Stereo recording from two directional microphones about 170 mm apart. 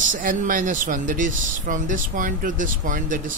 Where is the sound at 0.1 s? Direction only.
50° right (ahead or behind).